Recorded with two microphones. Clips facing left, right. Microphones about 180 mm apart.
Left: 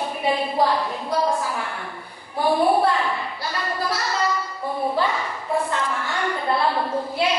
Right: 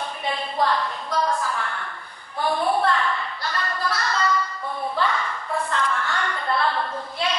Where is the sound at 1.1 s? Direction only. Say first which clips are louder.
Left 2 dB; 25° left (ahead or behind).